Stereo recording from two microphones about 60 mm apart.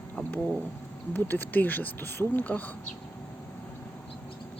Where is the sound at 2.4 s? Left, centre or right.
Left.